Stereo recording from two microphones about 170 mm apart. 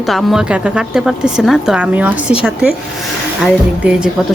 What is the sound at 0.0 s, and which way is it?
A woman's voice, centre (ahead or behind).